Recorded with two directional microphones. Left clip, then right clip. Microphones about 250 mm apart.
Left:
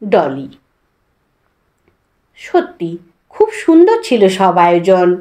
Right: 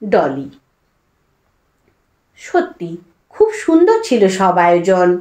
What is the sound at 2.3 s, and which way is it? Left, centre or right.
A woman's voice, left.